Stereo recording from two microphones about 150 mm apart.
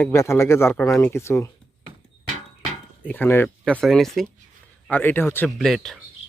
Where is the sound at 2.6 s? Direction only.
10° left (ahead or behind).